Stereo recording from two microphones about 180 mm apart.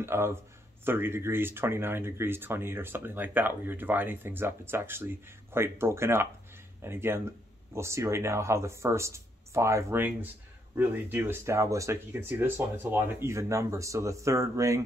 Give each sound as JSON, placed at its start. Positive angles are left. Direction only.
{"t": 0.0, "sound": "speech", "side_deg": -15}